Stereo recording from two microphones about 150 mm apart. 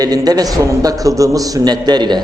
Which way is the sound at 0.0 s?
25° right (ahead or behind).